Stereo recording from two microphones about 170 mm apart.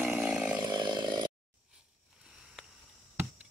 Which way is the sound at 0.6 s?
25° right (ahead or behind).